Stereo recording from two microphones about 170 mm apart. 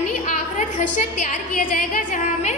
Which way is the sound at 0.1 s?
45° left (ahead or behind).